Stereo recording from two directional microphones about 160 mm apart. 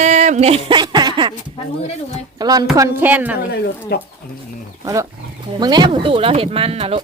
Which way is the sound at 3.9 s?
90° left.